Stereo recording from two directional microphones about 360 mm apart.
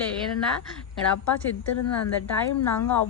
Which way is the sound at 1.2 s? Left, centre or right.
Left.